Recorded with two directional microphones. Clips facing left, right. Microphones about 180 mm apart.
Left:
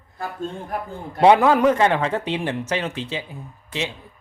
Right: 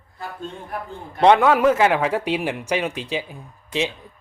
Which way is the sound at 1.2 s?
5° left (ahead or behind).